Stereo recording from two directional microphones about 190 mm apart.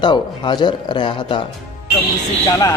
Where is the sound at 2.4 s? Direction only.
15° left (ahead or behind).